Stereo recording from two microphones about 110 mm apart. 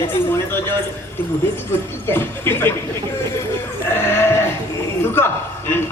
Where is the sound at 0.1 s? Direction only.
20° left (ahead or behind).